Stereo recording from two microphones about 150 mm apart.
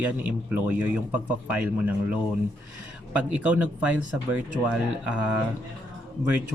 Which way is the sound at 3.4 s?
10° right (ahead or behind).